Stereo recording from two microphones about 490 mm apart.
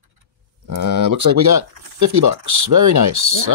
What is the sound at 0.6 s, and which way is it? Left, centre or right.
Speech, right.